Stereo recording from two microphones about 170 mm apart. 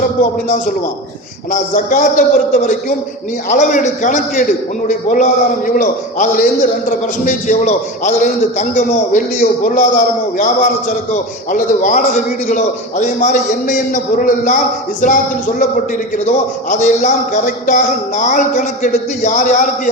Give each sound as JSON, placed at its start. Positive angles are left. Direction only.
{"t": 1.5, "sound": "a man's voice", "side_deg": 50}